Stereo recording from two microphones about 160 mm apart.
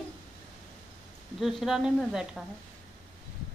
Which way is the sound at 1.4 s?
Centre (ahead or behind).